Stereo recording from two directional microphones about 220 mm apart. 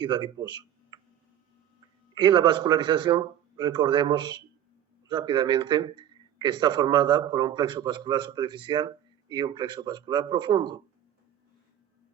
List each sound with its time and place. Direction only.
0.0 s speech: 20° right (ahead or behind)
2.1 s a man's voice: 20° right (ahead or behind)